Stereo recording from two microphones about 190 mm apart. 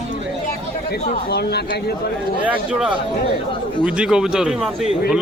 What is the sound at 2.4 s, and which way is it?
Speech, 5° right (ahead or behind).